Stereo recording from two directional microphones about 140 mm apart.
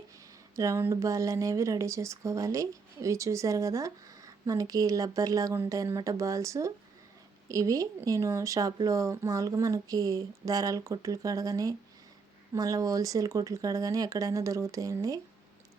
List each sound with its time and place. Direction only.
0.5 s speech: 20° right (ahead or behind)